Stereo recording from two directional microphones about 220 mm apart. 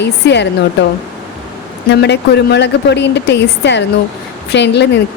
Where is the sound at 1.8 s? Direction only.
50° left (ahead or behind).